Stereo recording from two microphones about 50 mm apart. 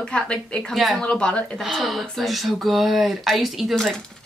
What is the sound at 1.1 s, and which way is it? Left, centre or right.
Speech, centre.